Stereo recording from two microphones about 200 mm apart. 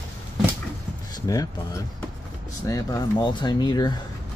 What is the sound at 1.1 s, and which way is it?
Speech, 15° left (ahead or behind).